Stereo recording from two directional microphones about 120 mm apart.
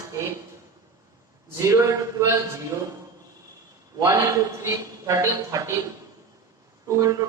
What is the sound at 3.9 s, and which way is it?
A man's voice, 30° right (ahead or behind).